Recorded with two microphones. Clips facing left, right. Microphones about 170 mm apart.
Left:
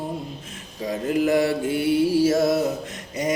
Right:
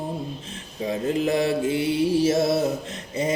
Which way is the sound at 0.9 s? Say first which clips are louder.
Left 2 dB; 25° right (ahead or behind).